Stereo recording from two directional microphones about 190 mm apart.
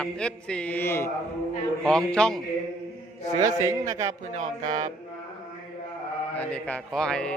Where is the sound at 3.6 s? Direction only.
15° right (ahead or behind).